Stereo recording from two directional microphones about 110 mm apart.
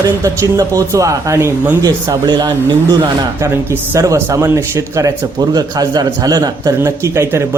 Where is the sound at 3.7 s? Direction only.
25° right (ahead or behind).